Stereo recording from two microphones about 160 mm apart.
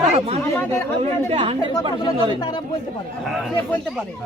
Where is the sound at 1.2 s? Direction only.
35° right (ahead or behind).